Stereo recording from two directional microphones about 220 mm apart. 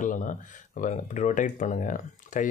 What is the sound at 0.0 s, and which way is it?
Speech, 35° left (ahead or behind).